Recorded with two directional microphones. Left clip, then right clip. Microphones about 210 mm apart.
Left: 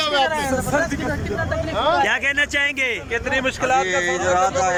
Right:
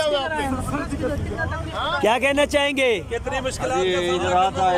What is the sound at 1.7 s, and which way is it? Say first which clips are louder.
Speech: left 6 dB; 25° left (ahead or behind).